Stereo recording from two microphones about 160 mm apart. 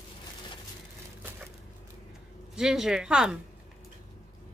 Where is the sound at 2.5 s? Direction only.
5° right (ahead or behind).